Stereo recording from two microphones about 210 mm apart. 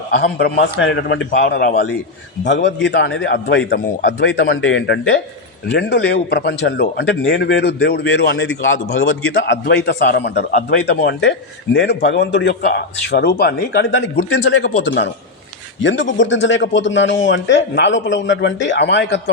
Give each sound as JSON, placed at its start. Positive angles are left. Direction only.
{"t": 0.2, "sound": "a man's voice", "side_deg": 50}
{"t": 8.4, "sound": "a man's voice", "side_deg": 70}